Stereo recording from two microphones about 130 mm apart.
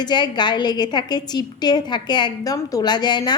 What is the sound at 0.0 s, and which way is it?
A woman's voice, 35° left (ahead or behind).